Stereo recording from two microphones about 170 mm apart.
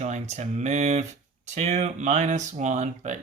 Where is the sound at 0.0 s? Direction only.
45° right (ahead or behind).